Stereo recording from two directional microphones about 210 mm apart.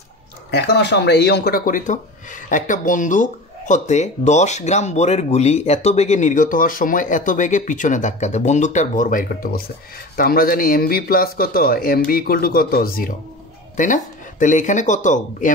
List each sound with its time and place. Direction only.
0.5 s speech: 55° left (ahead or behind); by 15.5 s 35° left (ahead or behind)